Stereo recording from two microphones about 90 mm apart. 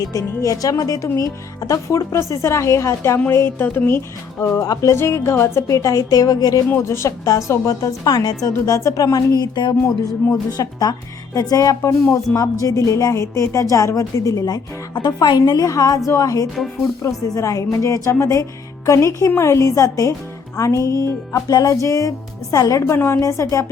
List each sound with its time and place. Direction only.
0.0 s a woman's voice: 40° left (ahead or behind); by 4.4 s 25° left (ahead or behind)
4.4 s a woman's voice: 40° left (ahead or behind)
4.9 s a woman's voice: 30° left (ahead or behind)
6.7 s a woman's voice: 25° left (ahead or behind)
9.4 s a woman's voice: 55° left (ahead or behind); by 23.6 s 35° left (ahead or behind)